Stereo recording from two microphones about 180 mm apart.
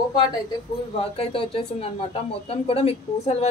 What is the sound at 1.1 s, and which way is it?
Speech, 30° left (ahead or behind).